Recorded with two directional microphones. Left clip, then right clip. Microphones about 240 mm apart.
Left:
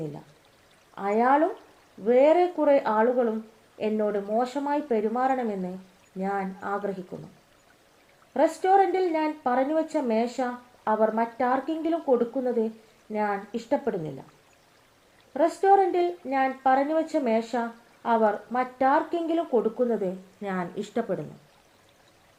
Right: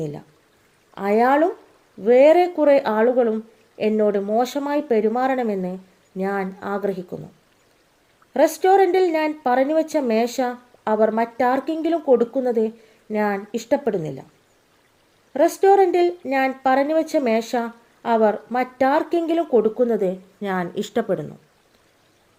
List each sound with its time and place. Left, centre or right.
0.9 s speech: right
8.3 s speech: right
15.3 s speech: right